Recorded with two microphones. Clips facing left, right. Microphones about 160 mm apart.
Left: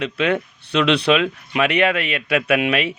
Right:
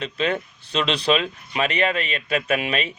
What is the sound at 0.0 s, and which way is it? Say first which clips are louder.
A man's voice: left 4 dB; 60° left (ahead or behind).